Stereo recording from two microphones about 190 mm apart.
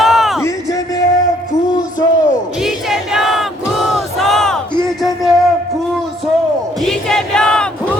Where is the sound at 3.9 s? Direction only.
Centre (ahead or behind).